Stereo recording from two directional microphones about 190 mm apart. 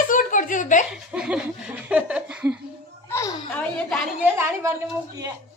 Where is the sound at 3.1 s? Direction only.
15° left (ahead or behind).